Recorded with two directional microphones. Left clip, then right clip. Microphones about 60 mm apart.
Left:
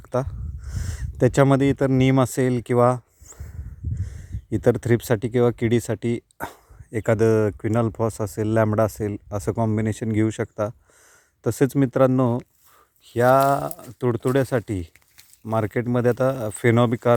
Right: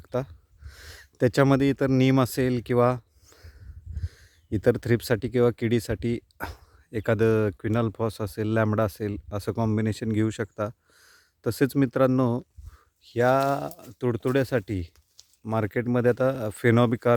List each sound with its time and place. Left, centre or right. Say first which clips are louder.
0.0 s a sound: left 5 dB; centre; by 1.9 s right
2.0 s speech: left 3 dB; right; by 9.6 s centre
9.6 s speech: left 1 dB; right
13.1 s speech: left 5 dB; centre
15.4 s speech: left 3 dB; right
16.5 s speech: left 2 dB; right